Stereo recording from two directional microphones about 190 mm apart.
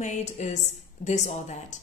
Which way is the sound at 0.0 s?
40° left (ahead or behind).